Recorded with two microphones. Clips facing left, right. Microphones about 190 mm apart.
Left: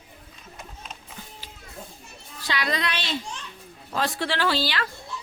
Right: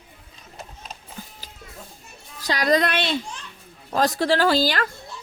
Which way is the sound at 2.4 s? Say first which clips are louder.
Right 8 dB; 40° right (ahead or behind).